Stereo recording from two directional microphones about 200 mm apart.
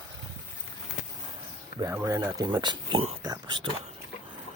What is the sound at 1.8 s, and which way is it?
Speech, 15° right (ahead or behind).